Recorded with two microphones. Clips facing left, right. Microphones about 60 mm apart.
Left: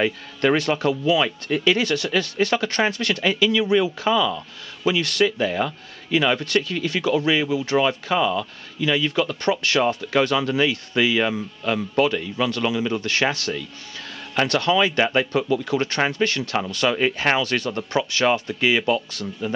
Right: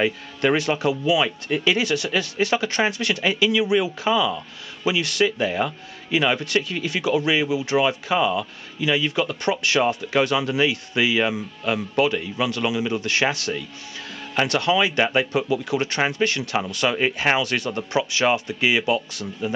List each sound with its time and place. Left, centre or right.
0.0 s speech: centre
14.5 s speech: centre